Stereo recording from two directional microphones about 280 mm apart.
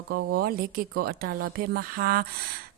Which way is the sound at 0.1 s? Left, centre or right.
Right.